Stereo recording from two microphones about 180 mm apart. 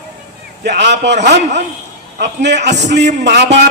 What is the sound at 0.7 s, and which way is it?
A man's voice, 75° right (ahead or behind).